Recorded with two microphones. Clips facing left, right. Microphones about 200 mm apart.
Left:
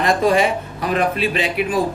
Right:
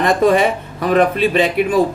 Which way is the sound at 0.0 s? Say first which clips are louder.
Right 3 dB; 50° right (ahead or behind).